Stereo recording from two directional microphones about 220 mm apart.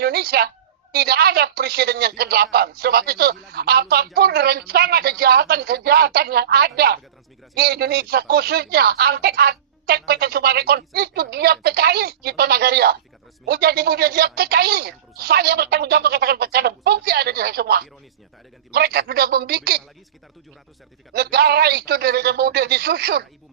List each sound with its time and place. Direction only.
0.0 s a woman's voice: 45° right (ahead or behind)
21.1 s a woman's voice: 45° right (ahead or behind)